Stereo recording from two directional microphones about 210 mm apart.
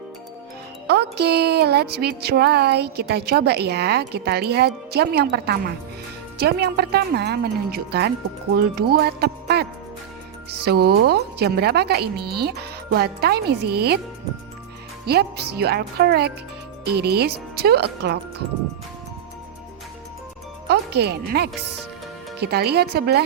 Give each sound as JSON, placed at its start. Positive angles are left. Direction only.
{"t": 0.9, "sound": "speech", "side_deg": -50}
{"t": 15.0, "sound": "speech", "side_deg": -50}
{"t": 20.7, "sound": "speech", "side_deg": -50}